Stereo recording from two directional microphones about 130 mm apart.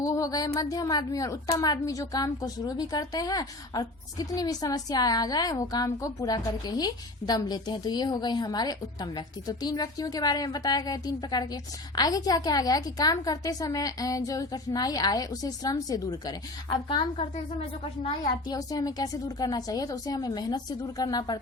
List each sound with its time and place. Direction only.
0.0 s a woman's voice: 25° left (ahead or behind)